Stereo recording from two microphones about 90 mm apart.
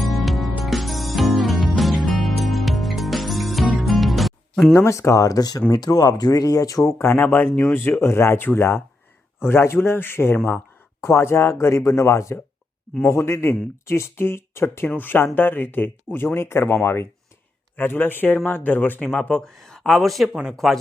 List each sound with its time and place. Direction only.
0.0 s music: centre (ahead or behind)
4.6 s speech: 30° left (ahead or behind); by 20.7 s centre (ahead or behind)